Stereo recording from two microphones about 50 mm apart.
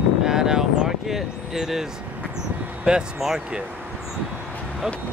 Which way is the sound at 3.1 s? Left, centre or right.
Centre.